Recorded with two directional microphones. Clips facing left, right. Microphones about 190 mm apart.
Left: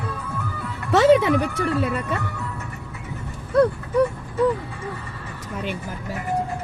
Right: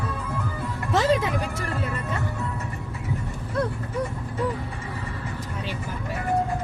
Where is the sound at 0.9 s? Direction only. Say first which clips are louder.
Left 7 dB; 70° left (ahead or behind).